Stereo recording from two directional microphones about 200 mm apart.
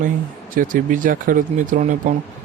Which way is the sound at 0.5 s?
40° right (ahead or behind).